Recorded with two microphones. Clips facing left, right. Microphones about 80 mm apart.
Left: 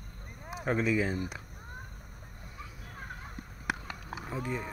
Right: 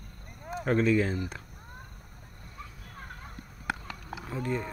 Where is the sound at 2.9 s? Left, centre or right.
Centre.